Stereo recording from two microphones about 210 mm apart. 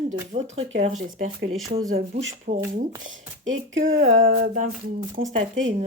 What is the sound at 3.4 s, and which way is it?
Speech, 65° right (ahead or behind).